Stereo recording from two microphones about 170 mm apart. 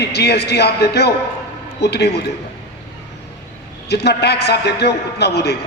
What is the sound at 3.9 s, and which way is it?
A man's voice, 80° left.